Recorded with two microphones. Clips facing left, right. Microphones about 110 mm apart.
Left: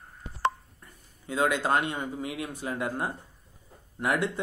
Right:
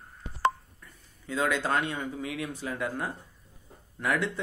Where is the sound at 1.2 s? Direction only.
10° left (ahead or behind).